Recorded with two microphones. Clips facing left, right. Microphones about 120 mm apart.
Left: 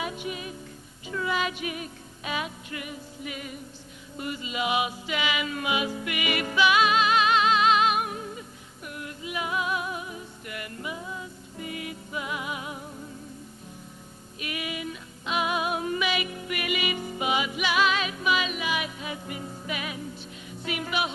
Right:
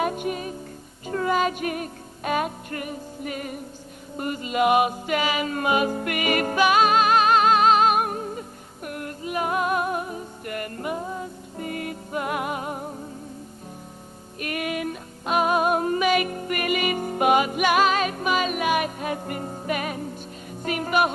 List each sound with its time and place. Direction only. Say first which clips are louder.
0.0 s music: right 7 dB; 50° right (ahead or behind)
14.3 s music: right 6 dB; 50° right (ahead or behind)